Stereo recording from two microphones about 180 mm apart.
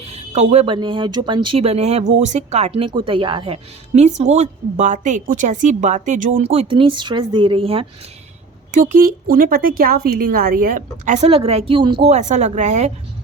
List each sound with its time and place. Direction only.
0.0 s a woman's voice: 35° right (ahead or behind)
8.7 s speech: 50° right (ahead or behind)